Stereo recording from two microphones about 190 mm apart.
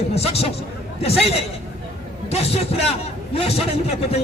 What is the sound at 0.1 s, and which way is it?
A man's voice, 35° left (ahead or behind).